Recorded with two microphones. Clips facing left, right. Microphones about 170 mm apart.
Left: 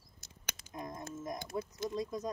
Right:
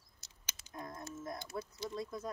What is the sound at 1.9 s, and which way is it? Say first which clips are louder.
Speech: left 4 dB; 15° left (ahead or behind).